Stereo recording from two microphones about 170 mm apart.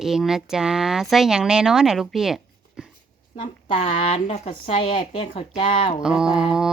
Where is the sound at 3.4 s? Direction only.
50° left (ahead or behind); by 5.4 s 30° left (ahead or behind).